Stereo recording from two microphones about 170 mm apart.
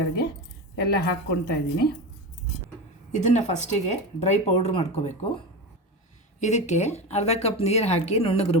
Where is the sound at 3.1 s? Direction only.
45° left (ahead or behind).